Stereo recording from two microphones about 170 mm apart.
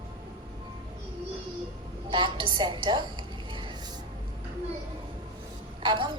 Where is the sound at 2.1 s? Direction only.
25° right (ahead or behind).